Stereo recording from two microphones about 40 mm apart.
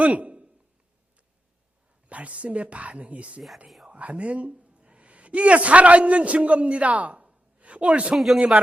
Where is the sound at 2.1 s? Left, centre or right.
Right.